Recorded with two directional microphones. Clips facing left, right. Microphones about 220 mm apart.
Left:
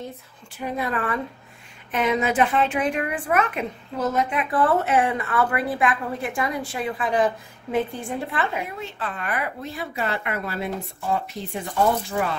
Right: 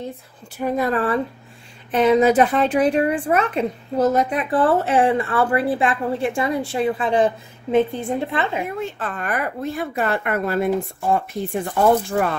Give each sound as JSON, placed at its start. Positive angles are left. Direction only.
{"t": 0.6, "sound": "a woman's voice", "side_deg": -45}
{"t": 8.7, "sound": "speech", "side_deg": -50}